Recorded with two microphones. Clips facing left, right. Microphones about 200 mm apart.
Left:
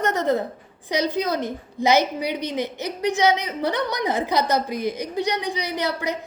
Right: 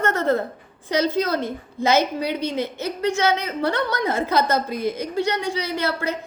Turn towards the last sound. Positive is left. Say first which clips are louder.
# right 1 dB
turn(degrees=15)  # may be behind; listen again after turning